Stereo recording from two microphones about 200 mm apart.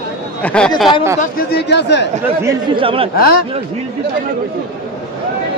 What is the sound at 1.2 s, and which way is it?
Speech, 50° left (ahead or behind).